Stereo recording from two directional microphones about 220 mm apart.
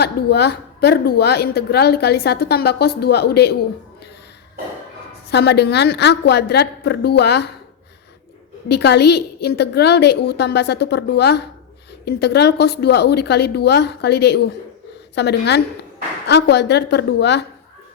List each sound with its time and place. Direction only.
0.0 s a woman's voice: 45° left (ahead or behind)
5.3 s a woman's voice: 50° left (ahead or behind)
8.7 s a woman's voice: 50° left (ahead or behind)